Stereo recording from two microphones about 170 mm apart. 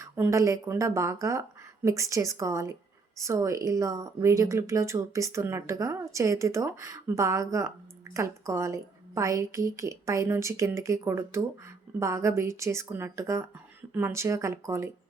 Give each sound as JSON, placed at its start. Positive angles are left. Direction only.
{"t": 0.0, "sound": "a woman's voice", "side_deg": -20}